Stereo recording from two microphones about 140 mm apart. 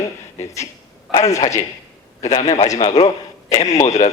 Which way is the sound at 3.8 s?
55° left (ahead or behind).